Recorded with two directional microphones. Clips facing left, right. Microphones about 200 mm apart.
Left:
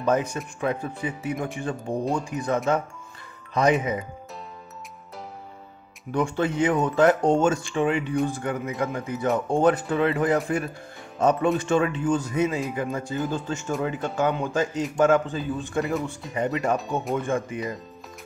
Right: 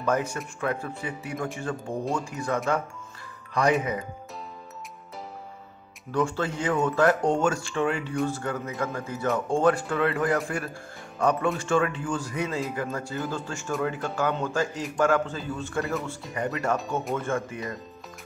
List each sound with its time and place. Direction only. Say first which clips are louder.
0.0 s speech: left 3 dB; 20° left (ahead or behind)
6.1 s speech: left 3 dB; 20° left (ahead or behind)